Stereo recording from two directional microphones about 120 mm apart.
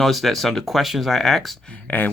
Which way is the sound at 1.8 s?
15° left (ahead or behind).